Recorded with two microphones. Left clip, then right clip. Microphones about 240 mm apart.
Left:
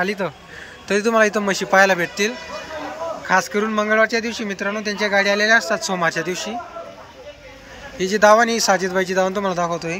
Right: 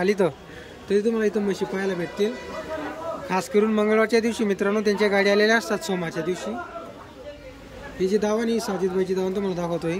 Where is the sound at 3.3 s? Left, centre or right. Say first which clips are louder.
Left 4 dB; centre.